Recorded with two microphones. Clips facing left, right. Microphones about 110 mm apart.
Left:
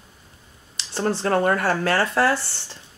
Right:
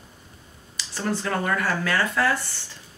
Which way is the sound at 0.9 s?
30° left (ahead or behind).